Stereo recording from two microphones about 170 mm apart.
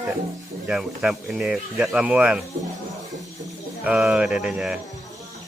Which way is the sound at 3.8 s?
5° right (ahead or behind).